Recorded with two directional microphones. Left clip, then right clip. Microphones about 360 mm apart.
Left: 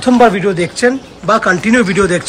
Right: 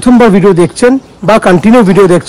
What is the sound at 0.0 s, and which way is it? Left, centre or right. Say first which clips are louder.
Speech: right 4 dB; centre.